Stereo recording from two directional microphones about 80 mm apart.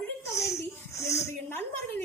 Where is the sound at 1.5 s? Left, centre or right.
Left.